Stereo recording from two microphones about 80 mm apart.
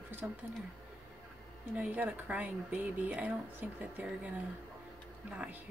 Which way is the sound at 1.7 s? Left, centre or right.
Centre.